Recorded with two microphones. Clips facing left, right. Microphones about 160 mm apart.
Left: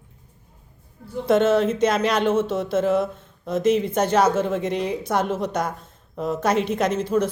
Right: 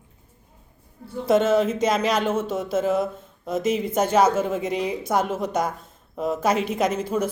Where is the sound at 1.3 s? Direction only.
5° right (ahead or behind).